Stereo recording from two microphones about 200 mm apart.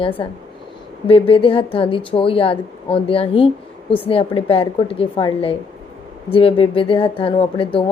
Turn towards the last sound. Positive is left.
turn(degrees=25)  # may be behind; listen again after turning